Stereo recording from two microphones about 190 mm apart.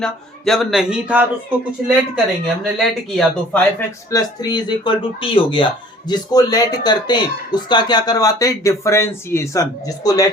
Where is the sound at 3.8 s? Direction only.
20° left (ahead or behind).